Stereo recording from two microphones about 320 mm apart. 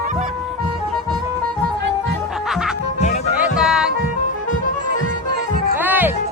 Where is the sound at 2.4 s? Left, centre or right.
Centre.